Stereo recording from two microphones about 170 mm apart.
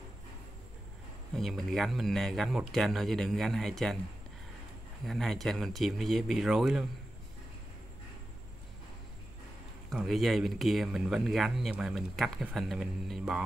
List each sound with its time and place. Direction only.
1.3 s speech: centre (ahead or behind)
5.0 s speech: centre (ahead or behind)
9.8 s speech: centre (ahead or behind)